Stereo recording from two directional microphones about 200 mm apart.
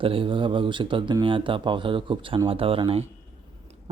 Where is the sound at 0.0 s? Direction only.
25° right (ahead or behind).